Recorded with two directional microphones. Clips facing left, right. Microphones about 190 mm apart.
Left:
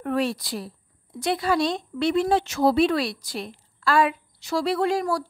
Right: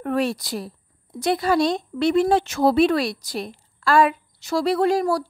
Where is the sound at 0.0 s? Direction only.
45° right (ahead or behind).